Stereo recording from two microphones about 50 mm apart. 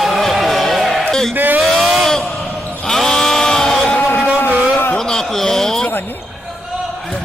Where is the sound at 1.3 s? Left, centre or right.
Right.